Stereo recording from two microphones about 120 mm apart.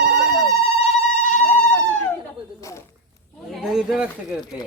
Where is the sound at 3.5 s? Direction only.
5° right (ahead or behind).